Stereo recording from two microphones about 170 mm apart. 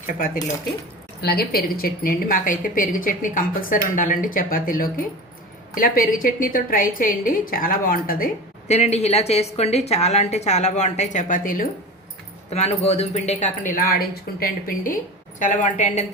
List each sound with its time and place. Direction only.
1.2 s a woman's voice: 65° left (ahead or behind)
8.6 s a woman's voice: 40° left (ahead or behind)
12.5 s speech: 40° left (ahead or behind); by 14.9 s 60° left (ahead or behind)
15.4 s speech: 45° left (ahead or behind)